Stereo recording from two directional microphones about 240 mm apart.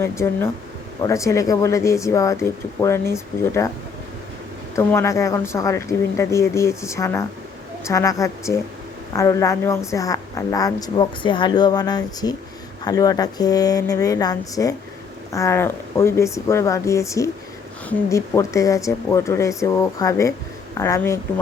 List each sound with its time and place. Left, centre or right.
0.0 s speech: centre
4.7 s speech: centre